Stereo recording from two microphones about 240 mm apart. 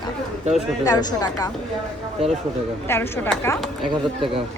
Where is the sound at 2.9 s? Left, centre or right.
Centre.